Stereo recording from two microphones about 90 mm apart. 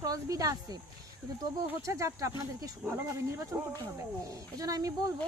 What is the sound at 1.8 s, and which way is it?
Speech, 35° right (ahead or behind).